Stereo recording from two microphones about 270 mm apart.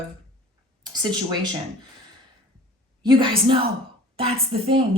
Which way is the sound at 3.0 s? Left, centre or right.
Centre.